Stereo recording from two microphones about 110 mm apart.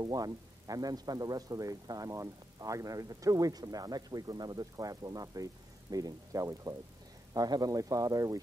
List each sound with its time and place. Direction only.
0.0 s speech: 35° right (ahead or behind)